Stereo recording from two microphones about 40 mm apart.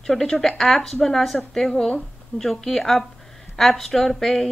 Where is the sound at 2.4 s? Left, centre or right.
Centre.